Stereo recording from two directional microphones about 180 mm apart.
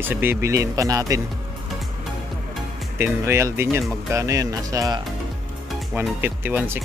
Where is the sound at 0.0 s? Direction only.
10° right (ahead or behind).